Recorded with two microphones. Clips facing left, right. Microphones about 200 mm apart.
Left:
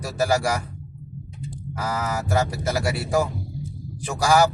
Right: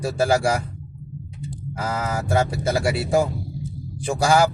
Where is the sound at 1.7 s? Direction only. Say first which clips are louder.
Right 1 dB; 25° right (ahead or behind).